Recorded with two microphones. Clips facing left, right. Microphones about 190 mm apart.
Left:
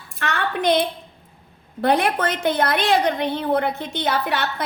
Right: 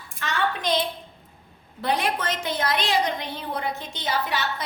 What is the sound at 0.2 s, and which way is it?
A woman's voice, 65° left (ahead or behind).